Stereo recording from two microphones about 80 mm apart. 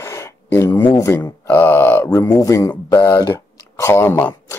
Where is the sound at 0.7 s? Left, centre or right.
Left.